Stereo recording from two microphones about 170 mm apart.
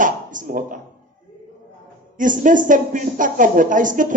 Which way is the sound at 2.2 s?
50° right (ahead or behind).